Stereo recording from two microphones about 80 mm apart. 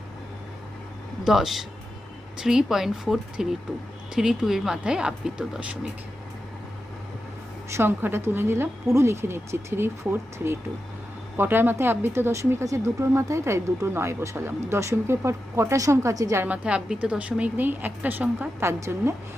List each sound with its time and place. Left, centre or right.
1.2 s a woman's voice: centre
7.8 s a woman's voice: right
16.4 s a woman's voice: centre
18.6 s speech: right